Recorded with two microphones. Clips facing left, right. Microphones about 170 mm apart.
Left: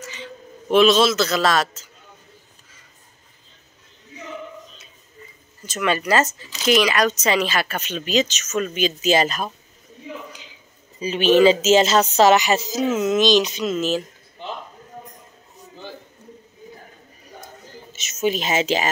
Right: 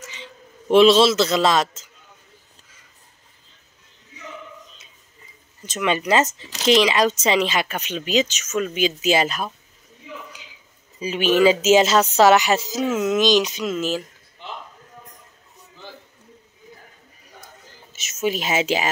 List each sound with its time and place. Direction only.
0.1 s a man's voice: 25° right (ahead or behind)
5.7 s speech: 20° right (ahead or behind)
11.0 s speech: 10° right (ahead or behind)
17.9 s speech: 5° right (ahead or behind)